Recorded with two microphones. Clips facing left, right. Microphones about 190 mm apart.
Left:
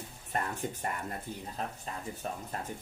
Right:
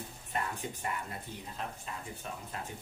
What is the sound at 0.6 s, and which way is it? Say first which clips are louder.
Speech: left 2 dB; 45° left (ahead or behind).